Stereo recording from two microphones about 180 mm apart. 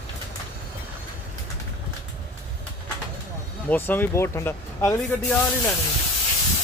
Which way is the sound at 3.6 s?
10° left (ahead or behind).